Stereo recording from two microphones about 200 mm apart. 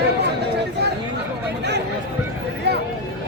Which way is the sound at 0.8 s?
55° right (ahead or behind).